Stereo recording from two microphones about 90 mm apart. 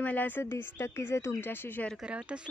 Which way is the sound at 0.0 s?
20° left (ahead or behind).